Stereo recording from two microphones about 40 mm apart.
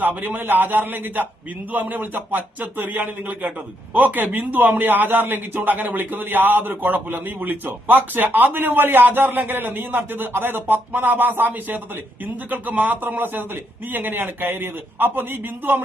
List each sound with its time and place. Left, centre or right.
0.0 s a man's voice: right